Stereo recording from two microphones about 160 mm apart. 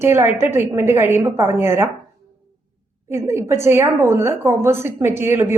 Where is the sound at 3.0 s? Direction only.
15° right (ahead or behind).